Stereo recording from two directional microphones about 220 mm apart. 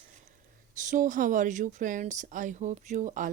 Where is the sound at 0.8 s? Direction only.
35° right (ahead or behind).